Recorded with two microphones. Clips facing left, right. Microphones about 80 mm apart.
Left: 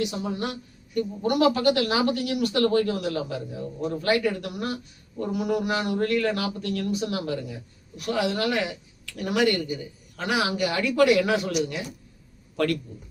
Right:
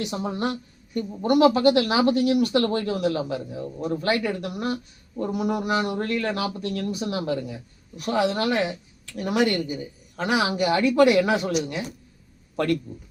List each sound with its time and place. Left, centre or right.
0.0 s a woman's voice: right